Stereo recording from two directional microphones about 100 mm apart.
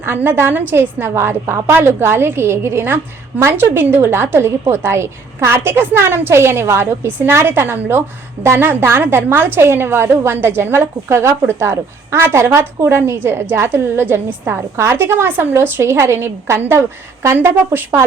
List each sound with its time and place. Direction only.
0.0 s a woman's voice: 20° right (ahead or behind)